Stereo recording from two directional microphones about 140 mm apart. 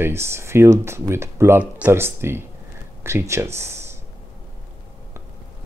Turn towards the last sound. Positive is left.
turn(degrees=-20)  # may be behind; listen again after turning